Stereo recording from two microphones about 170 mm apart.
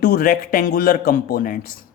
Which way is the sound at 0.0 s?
60° left (ahead or behind).